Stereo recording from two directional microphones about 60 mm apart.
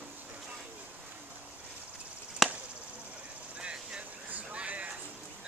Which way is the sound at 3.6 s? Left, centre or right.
Right.